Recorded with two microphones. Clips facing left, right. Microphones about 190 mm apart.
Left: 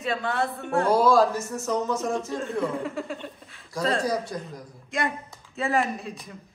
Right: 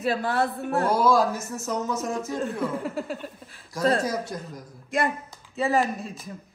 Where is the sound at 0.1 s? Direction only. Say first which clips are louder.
Right 1 dB; centre (ahead or behind).